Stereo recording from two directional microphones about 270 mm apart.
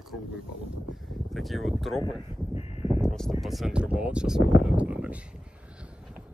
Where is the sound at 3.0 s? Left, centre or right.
Centre.